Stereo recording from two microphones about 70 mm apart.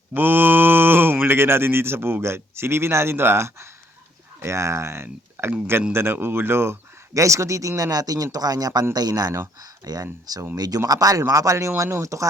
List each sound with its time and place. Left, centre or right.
0.1 s speech: right
7.1 s speech: right
7.8 s speech: right